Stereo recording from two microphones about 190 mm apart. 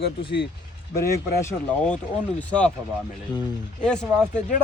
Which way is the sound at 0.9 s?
15° left (ahead or behind).